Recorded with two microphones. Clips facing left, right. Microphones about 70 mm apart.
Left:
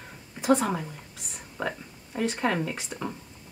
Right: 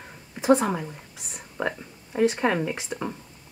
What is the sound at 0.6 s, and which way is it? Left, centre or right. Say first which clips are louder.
Speech: right 2 dB; centre.